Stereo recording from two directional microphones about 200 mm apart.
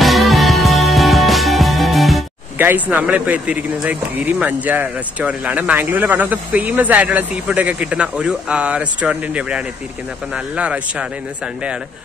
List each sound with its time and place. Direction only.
0.0 s music: centre (ahead or behind)
2.6 s speech: 10° right (ahead or behind)